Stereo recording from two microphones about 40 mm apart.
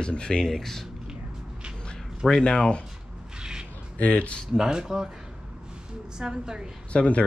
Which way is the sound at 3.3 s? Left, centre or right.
Right.